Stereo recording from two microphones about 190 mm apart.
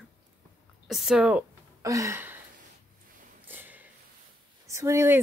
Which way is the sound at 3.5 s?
10° right (ahead or behind).